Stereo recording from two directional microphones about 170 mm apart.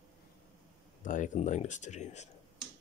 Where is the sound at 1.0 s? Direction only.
50° left (ahead or behind).